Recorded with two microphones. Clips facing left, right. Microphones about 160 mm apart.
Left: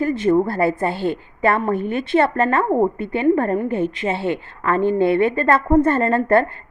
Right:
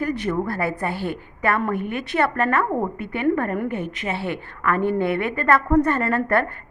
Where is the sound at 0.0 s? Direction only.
25° left (ahead or behind).